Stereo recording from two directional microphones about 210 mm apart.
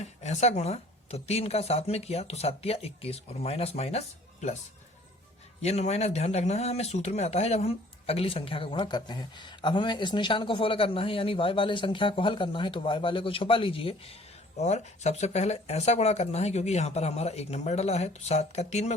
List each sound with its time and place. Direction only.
0.0 s speech: 35° left (ahead or behind)
5.6 s speech: 30° left (ahead or behind)